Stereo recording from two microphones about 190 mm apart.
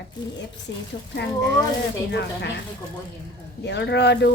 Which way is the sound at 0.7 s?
70° left (ahead or behind).